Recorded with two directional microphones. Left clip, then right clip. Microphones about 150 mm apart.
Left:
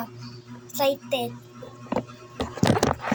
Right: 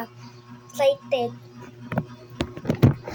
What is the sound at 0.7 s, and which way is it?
Speech, 35° right (ahead or behind).